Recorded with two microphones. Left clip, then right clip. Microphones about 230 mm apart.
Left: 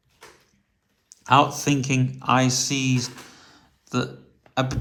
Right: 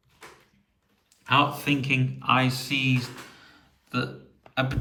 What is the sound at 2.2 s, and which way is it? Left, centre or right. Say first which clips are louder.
Speech: left 5 dB; centre.